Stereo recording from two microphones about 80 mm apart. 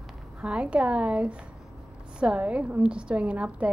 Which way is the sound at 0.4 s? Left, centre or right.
Centre.